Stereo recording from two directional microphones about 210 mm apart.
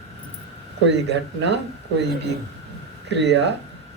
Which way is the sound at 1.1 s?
55° right (ahead or behind).